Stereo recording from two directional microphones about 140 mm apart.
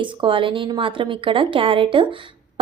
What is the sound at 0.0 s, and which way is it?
A woman's voice, 35° right (ahead or behind).